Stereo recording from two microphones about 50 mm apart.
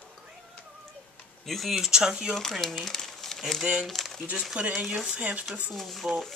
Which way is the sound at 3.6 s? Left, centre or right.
Centre.